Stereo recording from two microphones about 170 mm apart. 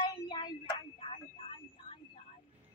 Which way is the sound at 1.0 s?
35° left (ahead or behind).